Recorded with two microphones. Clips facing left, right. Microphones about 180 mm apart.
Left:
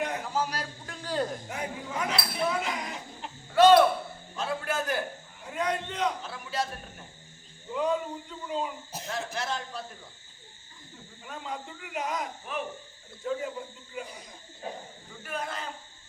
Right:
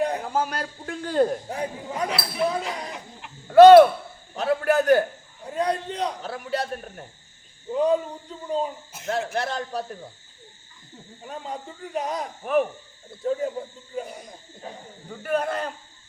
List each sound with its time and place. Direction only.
0.0 s a sound: 35° right (ahead or behind)
0.3 s a man's voice: 55° right (ahead or behind)
1.5 s speech: 35° right (ahead or behind)
3.4 s a man's voice: 60° right (ahead or behind)
5.5 s a man's voice: 35° right (ahead or behind)
6.2 s a man's voice: 60° right (ahead or behind)
7.7 s speech: 35° right (ahead or behind)
9.0 s a man's voice: 60° right (ahead or behind)
11.2 s speech: 35° right (ahead or behind)
12.4 s a man's voice: 55° right (ahead or behind)
13.2 s cricket: 35° right (ahead or behind)
15.2 s a man's voice: 60° right (ahead or behind)